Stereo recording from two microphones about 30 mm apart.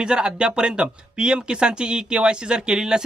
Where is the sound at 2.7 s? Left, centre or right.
Centre.